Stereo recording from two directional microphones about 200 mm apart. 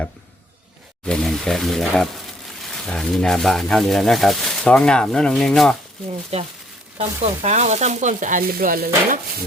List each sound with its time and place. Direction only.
1.0 s speech: 5° left (ahead or behind)
6.3 s sizzle: 30° right (ahead or behind); by 8.9 s 45° right (ahead or behind)